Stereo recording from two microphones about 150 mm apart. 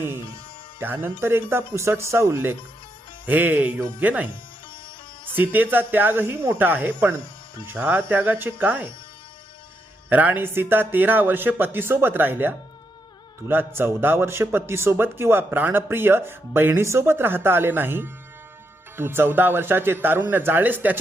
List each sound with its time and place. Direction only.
0.8 s a man's voice: 15° right (ahead or behind)
5.3 s a man's voice: 15° right (ahead or behind)
10.1 s a man's voice: 10° right (ahead or behind)